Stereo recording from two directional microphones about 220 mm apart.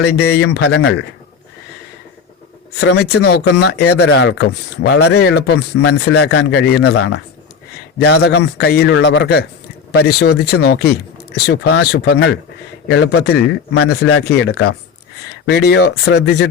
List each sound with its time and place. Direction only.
0.0 s speech: 50° left (ahead or behind)
2.8 s speech: 50° left (ahead or behind)
7.9 s speech: 50° left (ahead or behind)